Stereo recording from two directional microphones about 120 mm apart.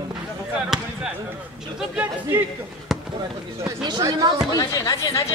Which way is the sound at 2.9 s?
Centre (ahead or behind).